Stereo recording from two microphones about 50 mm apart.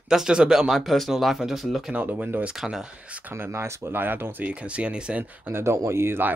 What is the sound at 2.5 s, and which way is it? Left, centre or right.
Speech, centre.